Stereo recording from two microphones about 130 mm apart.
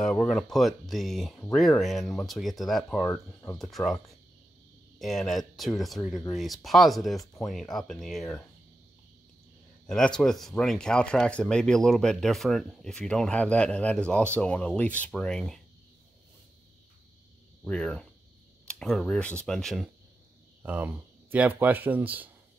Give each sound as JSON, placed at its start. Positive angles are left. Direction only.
{"t": 0.0, "sound": "speech", "side_deg": 5}
{"t": 3.1, "sound": "speech", "side_deg": 20}
{"t": 3.5, "sound": "speech", "side_deg": 0}
{"t": 9.8, "sound": "speech", "side_deg": 5}
{"t": 17.6, "sound": "speech", "side_deg": 5}
{"t": 20.6, "sound": "speech", "side_deg": -10}